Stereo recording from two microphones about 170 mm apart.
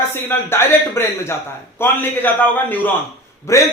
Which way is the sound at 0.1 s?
15° left (ahead or behind).